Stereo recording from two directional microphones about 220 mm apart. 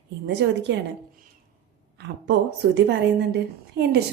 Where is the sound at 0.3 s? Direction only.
50° right (ahead or behind).